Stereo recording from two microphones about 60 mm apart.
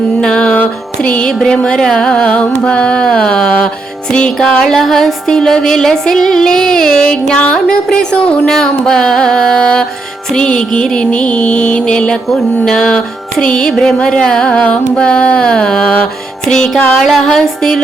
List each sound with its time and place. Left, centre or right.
0.2 s music: centre